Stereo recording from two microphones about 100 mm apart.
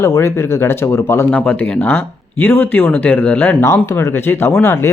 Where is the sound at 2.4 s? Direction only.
20° left (ahead or behind).